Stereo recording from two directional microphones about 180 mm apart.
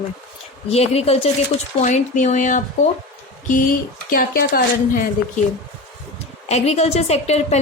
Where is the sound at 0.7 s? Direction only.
35° left (ahead or behind); by 5.0 s 55° left (ahead or behind).